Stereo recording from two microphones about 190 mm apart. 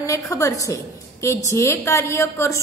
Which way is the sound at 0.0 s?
15° left (ahead or behind).